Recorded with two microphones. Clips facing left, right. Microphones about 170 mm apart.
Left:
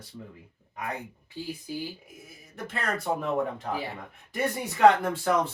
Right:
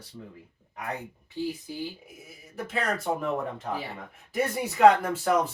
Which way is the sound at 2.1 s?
Centre (ahead or behind).